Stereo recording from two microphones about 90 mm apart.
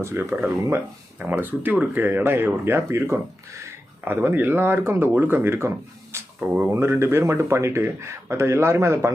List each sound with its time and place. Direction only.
0.0 s speech: 30° right (ahead or behind)
1.2 s speech: 20° right (ahead or behind)
6.4 s speech: 15° right (ahead or behind)
6.7 s speech: 30° right (ahead or behind)